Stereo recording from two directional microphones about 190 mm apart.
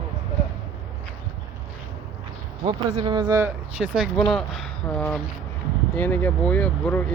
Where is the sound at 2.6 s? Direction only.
25° right (ahead or behind).